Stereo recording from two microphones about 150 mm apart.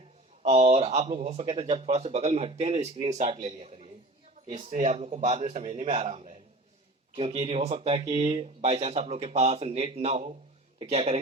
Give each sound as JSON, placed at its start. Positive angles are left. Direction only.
{"t": 0.4, "sound": "speech", "side_deg": -45}
{"t": 1.4, "sound": "speech", "side_deg": -35}
{"t": 4.4, "sound": "speech", "side_deg": -55}
{"t": 5.6, "sound": "speech", "side_deg": -35}